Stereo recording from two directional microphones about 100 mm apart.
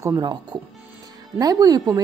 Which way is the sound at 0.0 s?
40° right (ahead or behind).